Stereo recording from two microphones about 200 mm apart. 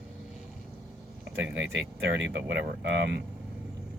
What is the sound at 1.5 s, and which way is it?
Speech, 60° right (ahead or behind).